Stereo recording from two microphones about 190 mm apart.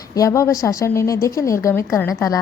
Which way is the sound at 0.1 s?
15° left (ahead or behind).